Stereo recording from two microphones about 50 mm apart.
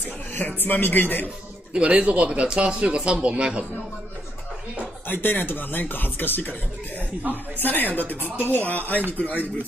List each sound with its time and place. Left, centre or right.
0.3 s a sound: left
0.7 s speech: left
1.7 s speech: right
5.0 s speech: left
7.5 s speech: left